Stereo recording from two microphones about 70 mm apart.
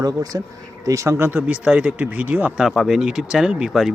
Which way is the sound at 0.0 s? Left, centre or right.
Right.